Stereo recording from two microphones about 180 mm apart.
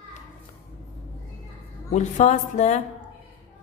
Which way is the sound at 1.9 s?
40° left (ahead or behind).